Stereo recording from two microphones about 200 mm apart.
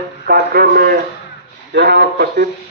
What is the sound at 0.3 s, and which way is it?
A man's voice, 50° right (ahead or behind).